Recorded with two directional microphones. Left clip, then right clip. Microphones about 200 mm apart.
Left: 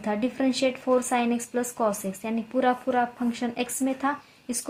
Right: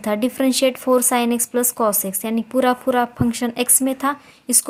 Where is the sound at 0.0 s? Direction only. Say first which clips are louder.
Right 7 dB; 40° right (ahead or behind).